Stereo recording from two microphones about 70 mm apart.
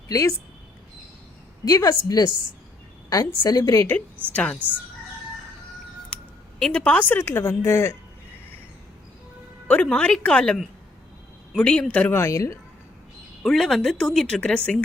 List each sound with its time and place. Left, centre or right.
0.1 s a woman's voice: left
1.6 s a woman's voice: left
4.3 s a woman's voice: centre
6.7 s a woman's voice: centre; by 7.9 s left
9.8 s speech: centre
12.1 s a woman's voice: left
13.4 s speech: centre